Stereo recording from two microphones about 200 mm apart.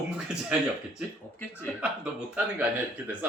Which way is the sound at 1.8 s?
5° right (ahead or behind).